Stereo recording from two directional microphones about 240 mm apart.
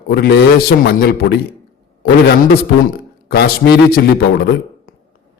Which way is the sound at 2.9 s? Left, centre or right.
Left.